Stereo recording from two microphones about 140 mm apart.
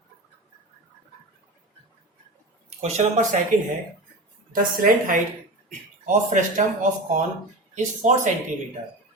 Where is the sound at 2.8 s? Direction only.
55° right (ahead or behind).